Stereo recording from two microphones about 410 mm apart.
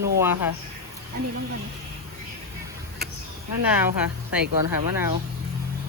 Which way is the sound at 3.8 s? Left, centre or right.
Centre.